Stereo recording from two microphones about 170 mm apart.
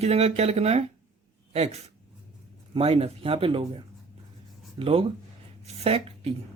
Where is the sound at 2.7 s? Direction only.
35° right (ahead or behind).